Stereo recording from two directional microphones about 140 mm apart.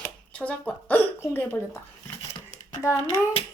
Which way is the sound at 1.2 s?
15° left (ahead or behind).